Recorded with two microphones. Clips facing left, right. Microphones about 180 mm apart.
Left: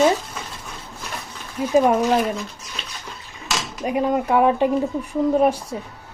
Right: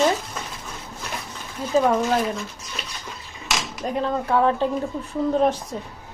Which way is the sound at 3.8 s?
10° left (ahead or behind).